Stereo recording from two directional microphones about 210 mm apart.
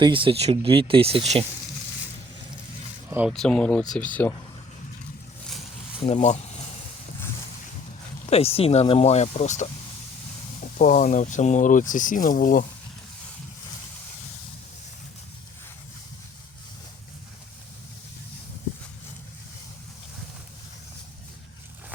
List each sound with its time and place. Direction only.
0.0 s speech: 25° right (ahead or behind)
3.1 s speech: 5° right (ahead or behind)
6.0 s speech: 30° left (ahead or behind)
8.3 s speech: 30° left (ahead or behind)